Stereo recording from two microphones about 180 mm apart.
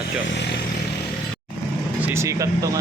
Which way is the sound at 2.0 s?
10° right (ahead or behind).